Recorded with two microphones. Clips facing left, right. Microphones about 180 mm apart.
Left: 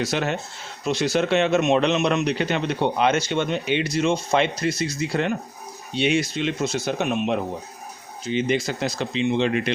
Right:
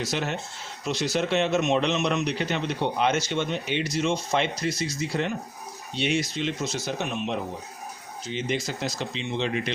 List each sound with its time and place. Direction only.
0.0 s a man's voice: 65° left (ahead or behind)